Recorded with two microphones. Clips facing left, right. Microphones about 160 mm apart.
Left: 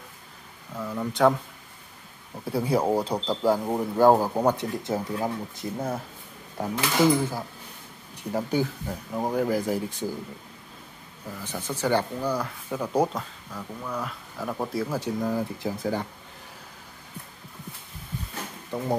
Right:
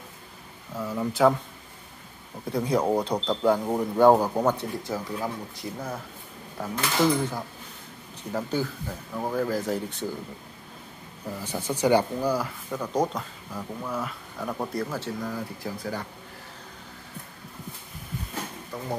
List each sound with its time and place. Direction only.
0.7 s speech: 5° right (ahead or behind)
2.4 s speech: 5° left (ahead or behind)
4.4 s speech: 15° left (ahead or behind)
4.8 s speech: 25° left (ahead or behind)
7.0 s speech: 10° left (ahead or behind)
11.4 s speech: 10° right (ahead or behind)
12.7 s speech: 10° left (ahead or behind)
13.5 s speech: 10° right (ahead or behind)
14.9 s speech: 15° left (ahead or behind)
18.7 s speech: 25° left (ahead or behind)